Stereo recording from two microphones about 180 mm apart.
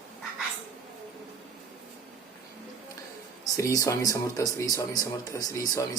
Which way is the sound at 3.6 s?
20° left (ahead or behind).